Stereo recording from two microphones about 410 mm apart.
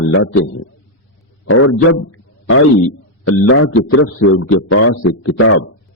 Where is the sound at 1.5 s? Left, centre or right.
Left.